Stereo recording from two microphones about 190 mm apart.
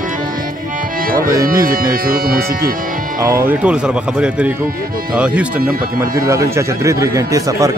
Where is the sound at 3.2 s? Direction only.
15° right (ahead or behind).